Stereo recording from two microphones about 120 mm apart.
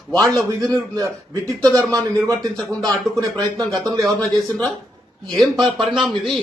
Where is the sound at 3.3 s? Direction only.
5° left (ahead or behind).